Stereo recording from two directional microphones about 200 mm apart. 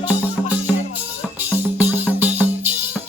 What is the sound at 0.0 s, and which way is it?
Music, 10° right (ahead or behind).